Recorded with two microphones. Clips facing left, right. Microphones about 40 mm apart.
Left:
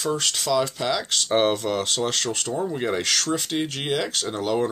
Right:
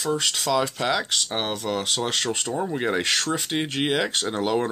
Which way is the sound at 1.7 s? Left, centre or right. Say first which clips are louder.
Left 1 dB; centre.